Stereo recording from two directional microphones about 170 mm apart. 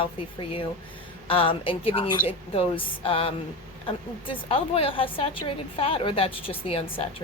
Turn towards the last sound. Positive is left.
turn(degrees=35)  # may be behind; listen again after turning